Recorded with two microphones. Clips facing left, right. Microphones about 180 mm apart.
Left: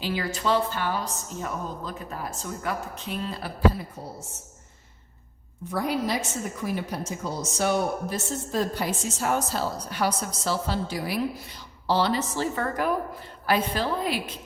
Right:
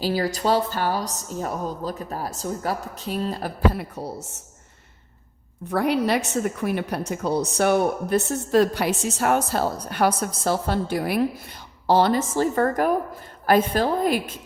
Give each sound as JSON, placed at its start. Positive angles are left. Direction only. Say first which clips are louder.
{"t": 0.0, "sound": "a woman's voice", "louder": "right 5 dB", "side_deg": -40}
{"t": 3.7, "sound": "a woman's voice", "louder": "right 1 dB", "side_deg": -70}
{"t": 5.6, "sound": "a woman's voice", "louder": "right 5 dB", "side_deg": -65}